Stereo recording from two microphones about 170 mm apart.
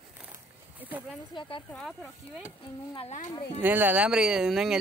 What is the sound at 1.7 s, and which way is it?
Speech, centre (ahead or behind).